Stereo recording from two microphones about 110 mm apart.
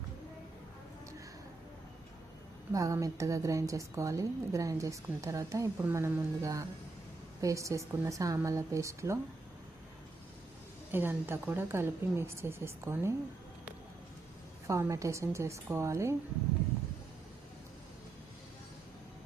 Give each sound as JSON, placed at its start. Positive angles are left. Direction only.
{"t": 2.7, "sound": "a woman's voice", "side_deg": -30}
{"t": 10.9, "sound": "a woman's voice", "side_deg": -20}
{"t": 14.7, "sound": "a woman's voice", "side_deg": -30}